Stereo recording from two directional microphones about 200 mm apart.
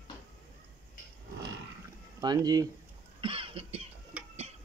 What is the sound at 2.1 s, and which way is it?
Speech, 20° right (ahead or behind).